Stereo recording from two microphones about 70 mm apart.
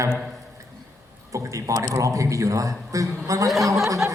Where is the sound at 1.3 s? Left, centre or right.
Right.